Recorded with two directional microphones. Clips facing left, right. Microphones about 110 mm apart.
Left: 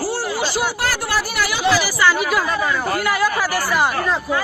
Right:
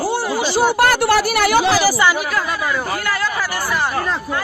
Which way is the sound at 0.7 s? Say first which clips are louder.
Right 7 dB; 60° right (ahead or behind).